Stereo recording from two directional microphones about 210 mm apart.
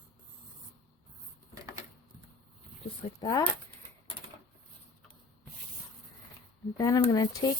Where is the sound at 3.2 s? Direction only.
20° left (ahead or behind).